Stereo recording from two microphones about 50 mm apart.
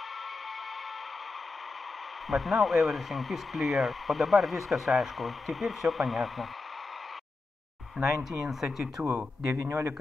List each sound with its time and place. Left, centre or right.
2.2 s speech: centre
8.0 s speech: centre
9.7 s speech: right